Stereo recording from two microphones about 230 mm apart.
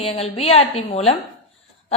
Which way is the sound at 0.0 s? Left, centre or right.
Left.